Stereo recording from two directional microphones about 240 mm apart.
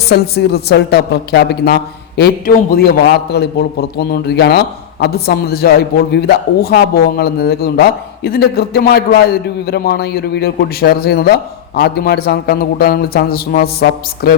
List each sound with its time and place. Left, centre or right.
0.1 s a woman's voice: left